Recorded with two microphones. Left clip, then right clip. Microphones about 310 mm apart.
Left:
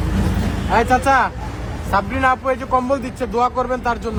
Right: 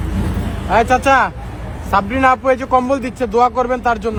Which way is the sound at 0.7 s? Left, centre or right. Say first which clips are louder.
Right 3 dB; centre.